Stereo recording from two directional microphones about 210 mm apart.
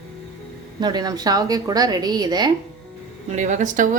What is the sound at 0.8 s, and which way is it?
A woman's voice, 20° right (ahead or behind).